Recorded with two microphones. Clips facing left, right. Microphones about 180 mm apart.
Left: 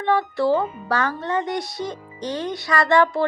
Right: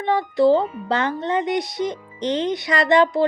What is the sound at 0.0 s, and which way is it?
Speech, 20° right (ahead or behind).